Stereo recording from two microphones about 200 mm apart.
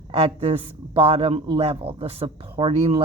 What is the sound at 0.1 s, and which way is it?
A man's voice, 30° right (ahead or behind).